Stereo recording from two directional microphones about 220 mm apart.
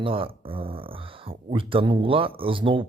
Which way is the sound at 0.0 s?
25° right (ahead or behind).